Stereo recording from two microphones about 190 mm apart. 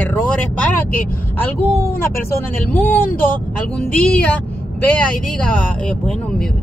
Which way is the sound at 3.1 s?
50° left (ahead or behind).